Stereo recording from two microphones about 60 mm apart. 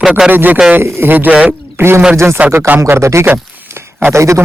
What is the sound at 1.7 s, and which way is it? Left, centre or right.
Speech, right.